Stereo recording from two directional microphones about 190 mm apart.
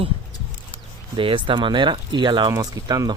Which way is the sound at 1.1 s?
25° right (ahead or behind).